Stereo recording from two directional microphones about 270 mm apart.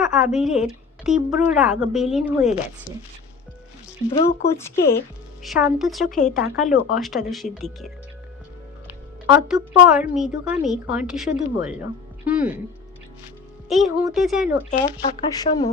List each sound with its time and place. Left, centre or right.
0.0 s a woman's voice: centre
4.8 s speech: left
5.4 s a woman's voice: centre
6.1 s speech: left
6.4 s a woman's voice: centre
9.2 s a woman's voice: centre
13.7 s a woman's voice: centre
14.7 s speech: centre